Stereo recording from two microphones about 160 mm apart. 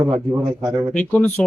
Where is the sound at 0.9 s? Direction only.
10° left (ahead or behind).